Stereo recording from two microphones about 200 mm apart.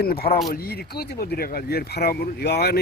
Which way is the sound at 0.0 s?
50° left (ahead or behind).